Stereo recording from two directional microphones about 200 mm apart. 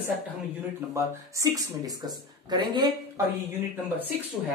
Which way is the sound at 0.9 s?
15° right (ahead or behind).